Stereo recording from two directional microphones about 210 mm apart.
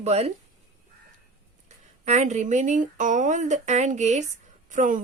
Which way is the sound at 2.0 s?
35° right (ahead or behind).